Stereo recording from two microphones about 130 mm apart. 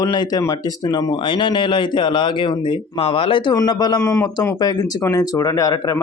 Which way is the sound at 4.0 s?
20° left (ahead or behind).